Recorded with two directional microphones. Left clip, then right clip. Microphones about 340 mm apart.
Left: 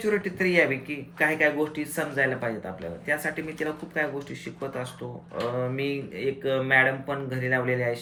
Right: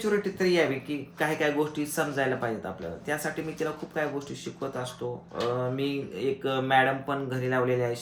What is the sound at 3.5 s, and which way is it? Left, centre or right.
Speech, centre.